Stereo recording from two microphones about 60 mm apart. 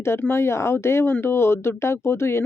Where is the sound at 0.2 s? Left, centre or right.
Left.